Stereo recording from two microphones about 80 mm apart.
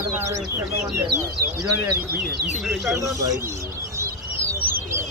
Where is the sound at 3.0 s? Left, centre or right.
Right.